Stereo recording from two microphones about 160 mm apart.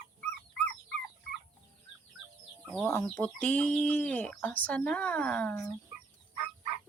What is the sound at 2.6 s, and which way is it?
Chicken, 5° left (ahead or behind).